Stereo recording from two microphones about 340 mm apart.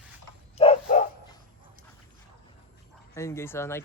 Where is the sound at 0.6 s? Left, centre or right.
Centre.